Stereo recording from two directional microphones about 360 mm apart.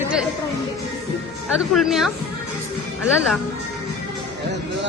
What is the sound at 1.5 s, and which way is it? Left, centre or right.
Speech, centre.